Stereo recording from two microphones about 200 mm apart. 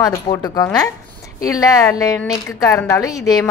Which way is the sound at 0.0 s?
20° left (ahead or behind).